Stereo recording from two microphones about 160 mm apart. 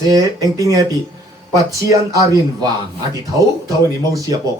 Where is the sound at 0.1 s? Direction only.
20° right (ahead or behind).